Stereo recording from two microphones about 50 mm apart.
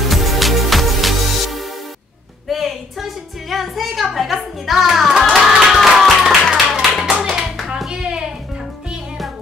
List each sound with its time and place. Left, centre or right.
0.1 s music: centre
5.3 s clapping: centre
7.1 s clapping: right